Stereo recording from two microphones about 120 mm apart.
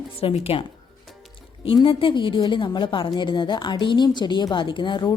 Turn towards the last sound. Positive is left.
turn(degrees=40)  # may be behind; listen again after turning